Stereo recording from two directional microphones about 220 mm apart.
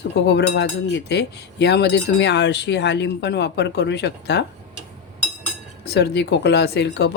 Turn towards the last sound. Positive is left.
turn(degrees=50)  # may be behind; listen again after turning